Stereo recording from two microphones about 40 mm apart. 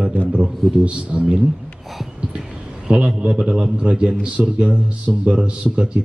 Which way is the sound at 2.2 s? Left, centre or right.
Right.